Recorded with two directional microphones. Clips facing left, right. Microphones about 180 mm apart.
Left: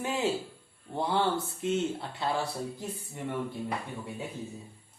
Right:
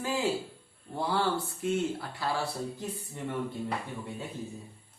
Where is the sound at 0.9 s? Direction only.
20° left (ahead or behind).